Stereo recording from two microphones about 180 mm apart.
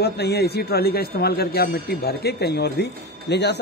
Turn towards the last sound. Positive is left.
turn(degrees=70)  # may be behind; listen again after turning